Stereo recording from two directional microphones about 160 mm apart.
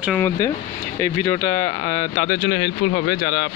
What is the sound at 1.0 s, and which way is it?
Speech, 20° left (ahead or behind).